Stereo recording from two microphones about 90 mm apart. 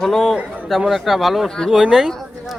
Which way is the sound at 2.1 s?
5° left (ahead or behind).